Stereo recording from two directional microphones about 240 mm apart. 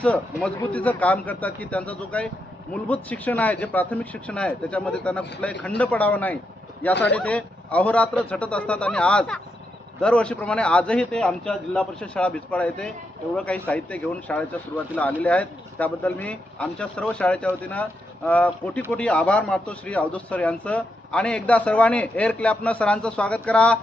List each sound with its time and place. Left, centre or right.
0.4 s a man's voice: centre